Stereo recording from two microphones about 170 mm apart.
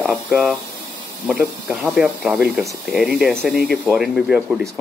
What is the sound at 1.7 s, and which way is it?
Speech, 5° right (ahead or behind).